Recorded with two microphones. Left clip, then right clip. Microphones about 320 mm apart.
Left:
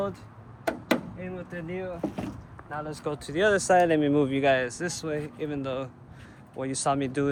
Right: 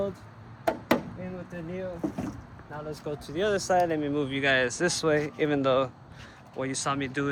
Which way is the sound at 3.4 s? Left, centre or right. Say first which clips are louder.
Left 4 dB; left.